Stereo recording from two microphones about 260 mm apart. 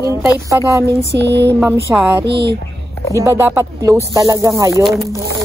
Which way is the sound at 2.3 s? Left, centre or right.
Right.